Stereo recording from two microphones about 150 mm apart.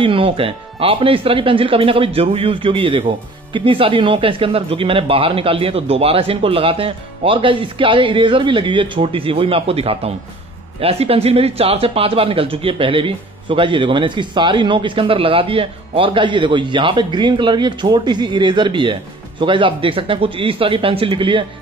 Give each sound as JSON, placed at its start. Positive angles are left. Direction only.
{"t": 0.0, "sound": "speech", "side_deg": -35}